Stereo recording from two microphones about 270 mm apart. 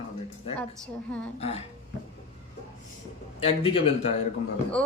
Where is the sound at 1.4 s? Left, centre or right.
Left.